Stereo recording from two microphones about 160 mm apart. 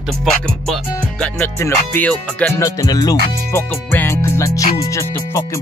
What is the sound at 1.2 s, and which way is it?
Music, 10° left (ahead or behind).